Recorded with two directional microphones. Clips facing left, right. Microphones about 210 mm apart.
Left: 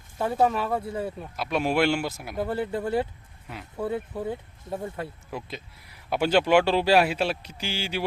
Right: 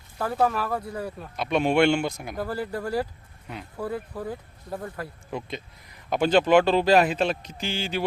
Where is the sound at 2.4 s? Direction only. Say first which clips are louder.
Left 2 dB; 25° left (ahead or behind).